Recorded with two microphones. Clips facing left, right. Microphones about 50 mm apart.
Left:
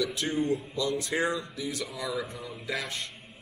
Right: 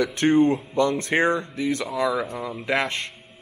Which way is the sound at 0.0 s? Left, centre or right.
Right.